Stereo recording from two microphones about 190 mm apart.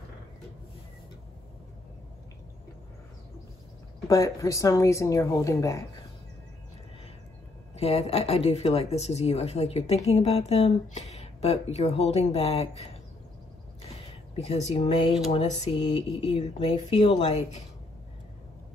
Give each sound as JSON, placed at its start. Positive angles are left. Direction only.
{"t": 4.1, "sound": "speech", "side_deg": 15}
{"t": 7.8, "sound": "speech", "side_deg": 35}
{"t": 14.3, "sound": "speech", "side_deg": 35}